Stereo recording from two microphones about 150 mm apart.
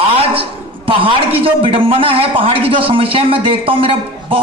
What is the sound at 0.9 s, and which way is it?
A woman's voice, 35° right (ahead or behind).